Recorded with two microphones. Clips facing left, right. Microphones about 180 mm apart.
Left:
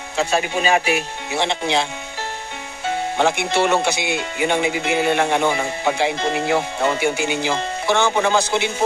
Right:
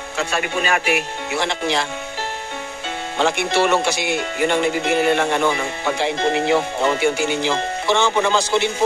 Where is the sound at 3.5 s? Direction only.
20° left (ahead or behind).